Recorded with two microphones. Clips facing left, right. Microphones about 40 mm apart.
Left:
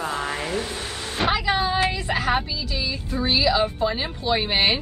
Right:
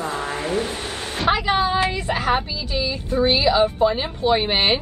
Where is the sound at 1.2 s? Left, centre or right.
Left.